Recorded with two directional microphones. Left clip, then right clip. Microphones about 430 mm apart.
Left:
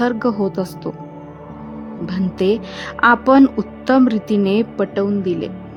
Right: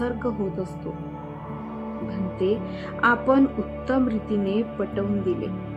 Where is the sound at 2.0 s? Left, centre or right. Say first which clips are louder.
Left 7 dB; left.